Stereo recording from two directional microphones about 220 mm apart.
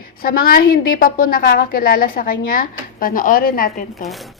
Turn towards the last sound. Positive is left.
turn(degrees=40)  # may be behind; listen again after turning